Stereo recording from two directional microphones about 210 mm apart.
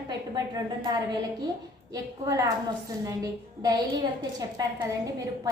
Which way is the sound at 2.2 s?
15° right (ahead or behind).